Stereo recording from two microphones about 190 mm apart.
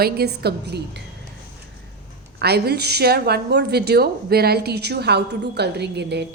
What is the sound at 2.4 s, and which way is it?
A woman's voice, 55° right (ahead or behind).